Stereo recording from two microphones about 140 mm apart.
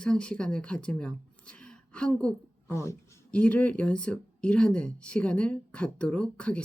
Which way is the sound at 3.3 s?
10° left (ahead or behind).